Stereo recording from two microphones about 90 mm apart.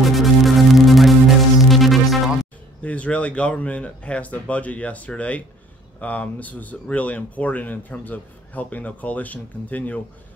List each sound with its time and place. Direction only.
0.0 s music: centre (ahead or behind)
2.8 s speech: 15° left (ahead or behind)